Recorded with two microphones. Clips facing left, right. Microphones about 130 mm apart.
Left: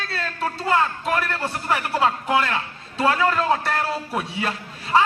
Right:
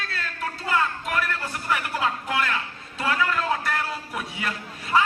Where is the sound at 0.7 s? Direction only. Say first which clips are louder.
Left 4 dB; 30° left (ahead or behind).